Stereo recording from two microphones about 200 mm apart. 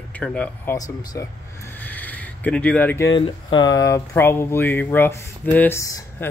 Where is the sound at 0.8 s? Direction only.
15° left (ahead or behind).